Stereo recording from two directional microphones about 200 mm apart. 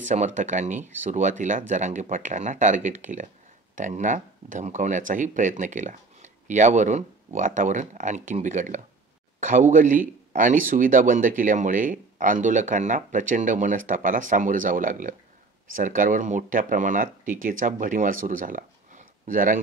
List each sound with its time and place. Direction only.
0.0 s speech: 35° right (ahead or behind)